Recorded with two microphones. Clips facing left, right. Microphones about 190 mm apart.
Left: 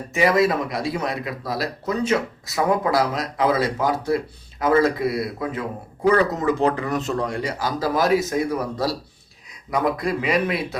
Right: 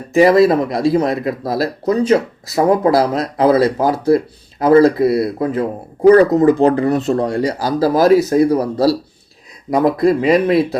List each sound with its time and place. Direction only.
0.1 s a man's voice: 35° right (ahead or behind)